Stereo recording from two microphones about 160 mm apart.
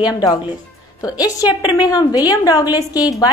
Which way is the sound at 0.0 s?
25° left (ahead or behind).